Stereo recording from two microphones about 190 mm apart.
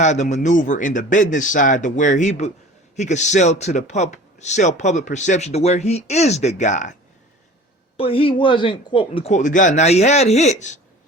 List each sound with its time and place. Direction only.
0.0 s a man's voice: 40° left (ahead or behind)
7.9 s a man's voice: 30° left (ahead or behind)